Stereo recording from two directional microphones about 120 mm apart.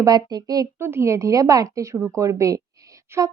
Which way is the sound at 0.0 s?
35° right (ahead or behind).